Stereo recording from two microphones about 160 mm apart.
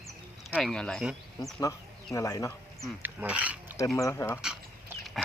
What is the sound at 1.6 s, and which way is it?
Speech, 20° left (ahead or behind).